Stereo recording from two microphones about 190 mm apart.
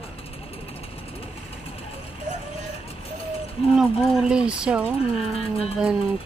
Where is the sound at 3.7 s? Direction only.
Centre (ahead or behind).